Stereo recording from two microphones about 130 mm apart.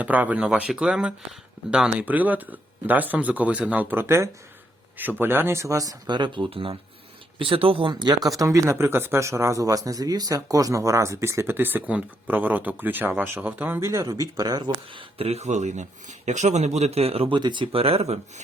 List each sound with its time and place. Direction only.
0.0 s speech: 10° right (ahead or behind); by 14.6 s 30° right (ahead or behind)
14.6 s speech: 45° right (ahead or behind)